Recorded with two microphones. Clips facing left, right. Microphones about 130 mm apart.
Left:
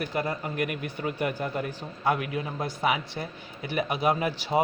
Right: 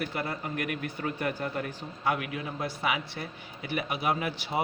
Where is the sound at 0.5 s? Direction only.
25° left (ahead or behind).